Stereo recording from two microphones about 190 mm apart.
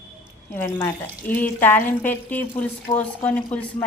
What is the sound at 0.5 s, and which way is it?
A woman's voice, 10° left (ahead or behind).